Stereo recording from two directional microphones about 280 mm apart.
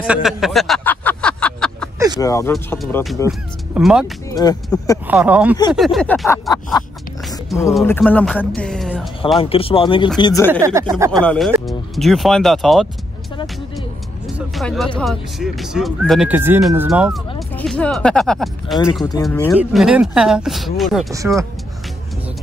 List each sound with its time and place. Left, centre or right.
0.0 s a sound: centre
2.1 s speech: centre
4.3 s speech: centre
5.0 s speech: centre
9.4 s speech: centre
10.5 s speech: centre
11.2 s speech: centre
13.7 s vehicle: centre
15.0 s speech: centre
19.6 s speech: centre